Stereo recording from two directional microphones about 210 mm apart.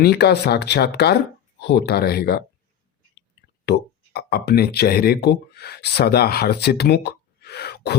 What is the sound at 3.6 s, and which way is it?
Speech, 50° left (ahead or behind).